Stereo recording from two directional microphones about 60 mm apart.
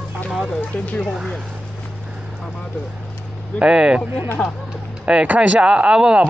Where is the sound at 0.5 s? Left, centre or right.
Left.